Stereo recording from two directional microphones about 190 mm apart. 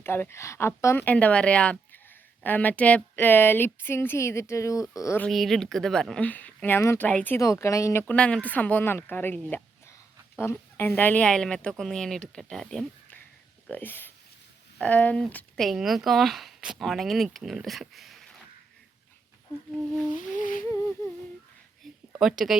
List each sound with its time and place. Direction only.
0.0 s speech: 10° left (ahead or behind)
20.1 s a sound: 45° left (ahead or behind)
22.2 s speech: centre (ahead or behind)